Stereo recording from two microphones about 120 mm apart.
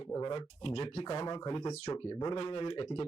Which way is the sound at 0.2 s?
50° left (ahead or behind).